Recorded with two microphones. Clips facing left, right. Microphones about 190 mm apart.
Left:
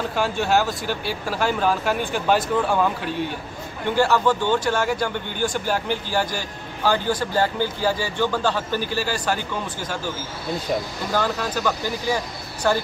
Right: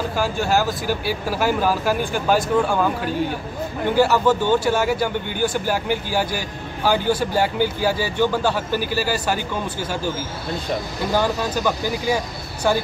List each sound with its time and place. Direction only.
0.1 s speech: centre (ahead or behind)
4.0 s speech: 5° right (ahead or behind)
11.1 s speech: 10° right (ahead or behind)